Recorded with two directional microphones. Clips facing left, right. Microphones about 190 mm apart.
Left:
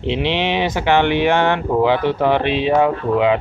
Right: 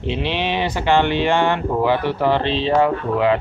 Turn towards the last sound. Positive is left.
turn(degrees=20)  # may be behind; listen again after turning